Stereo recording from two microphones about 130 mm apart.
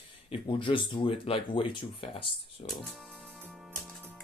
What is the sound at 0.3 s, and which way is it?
Speech, 40° left (ahead or behind).